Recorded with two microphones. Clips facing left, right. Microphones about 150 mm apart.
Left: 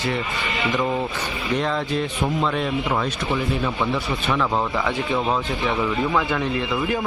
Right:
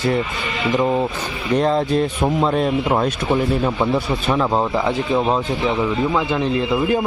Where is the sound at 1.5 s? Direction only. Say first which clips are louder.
Right 7 dB; 40° right (ahead or behind); by 6.4 s 20° right (ahead or behind).